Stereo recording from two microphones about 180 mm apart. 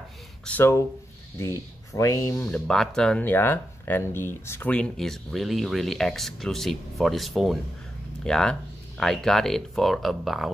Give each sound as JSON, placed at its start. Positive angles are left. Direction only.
{"t": 0.5, "sound": "speech", "side_deg": 10}
{"t": 2.0, "sound": "speech", "side_deg": 15}
{"t": 2.4, "sound": "speech", "side_deg": 5}